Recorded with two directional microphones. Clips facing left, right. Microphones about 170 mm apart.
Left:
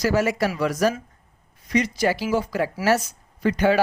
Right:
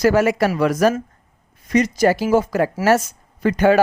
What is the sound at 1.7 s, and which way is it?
Speech, 45° right (ahead or behind).